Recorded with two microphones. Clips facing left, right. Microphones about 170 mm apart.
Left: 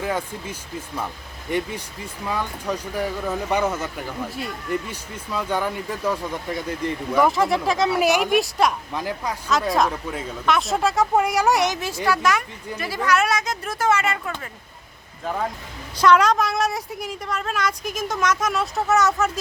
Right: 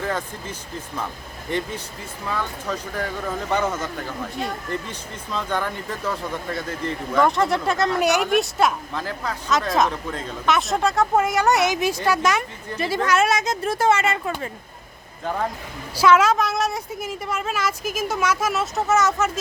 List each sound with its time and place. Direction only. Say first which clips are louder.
0.0 s speech: left 1 dB; 10° left (ahead or behind)
8.9 s speech: left 1 dB; 15° left (ahead or behind)
9.5 s a woman's voice: even; centre (ahead or behind)
11.7 s speech: right 2 dB; 15° right (ahead or behind)
15.2 s a woman's voice: right 1 dB; centre (ahead or behind)